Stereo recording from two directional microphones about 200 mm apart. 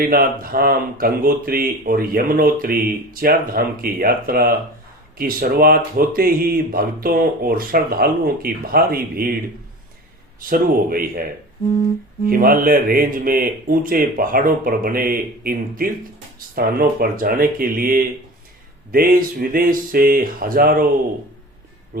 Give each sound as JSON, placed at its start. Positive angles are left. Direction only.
{"t": 0.0, "sound": "speech", "side_deg": -50}
{"t": 10.5, "sound": "speech", "side_deg": -45}
{"t": 12.3, "sound": "speech", "side_deg": -45}